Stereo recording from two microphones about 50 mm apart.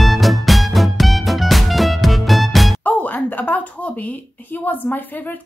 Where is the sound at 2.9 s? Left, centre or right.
Left.